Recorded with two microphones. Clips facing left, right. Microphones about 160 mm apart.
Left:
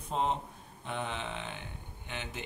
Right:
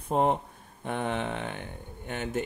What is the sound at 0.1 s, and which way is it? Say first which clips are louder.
Speech: right 7 dB; 55° right (ahead or behind).